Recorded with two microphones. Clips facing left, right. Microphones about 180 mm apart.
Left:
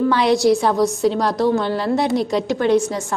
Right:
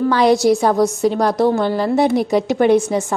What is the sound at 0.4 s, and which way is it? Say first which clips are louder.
A woman's voice: right 2 dB; centre (ahead or behind).